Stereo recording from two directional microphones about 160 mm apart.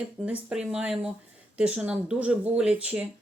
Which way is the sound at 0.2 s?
10° right (ahead or behind).